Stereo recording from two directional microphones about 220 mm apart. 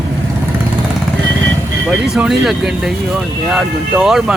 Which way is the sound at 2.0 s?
Centre (ahead or behind).